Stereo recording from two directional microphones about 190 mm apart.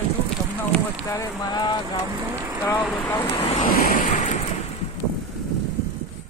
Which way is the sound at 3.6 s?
45° left (ahead or behind).